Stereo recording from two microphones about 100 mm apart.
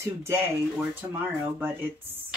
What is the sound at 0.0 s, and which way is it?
Speech, 25° right (ahead or behind).